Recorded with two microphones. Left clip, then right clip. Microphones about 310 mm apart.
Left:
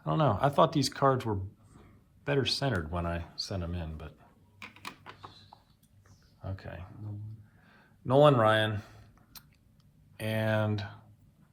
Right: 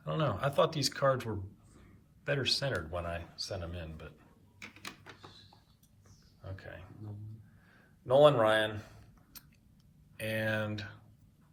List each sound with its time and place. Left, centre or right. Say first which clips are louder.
0.0 s speech: left 6 dB; centre
4.6 s typewriter: left 3 dB; left
6.4 s wild animals: left 3 dB; centre
8.0 s speech: left 1 dB; centre
10.2 s speech: left 3 dB; centre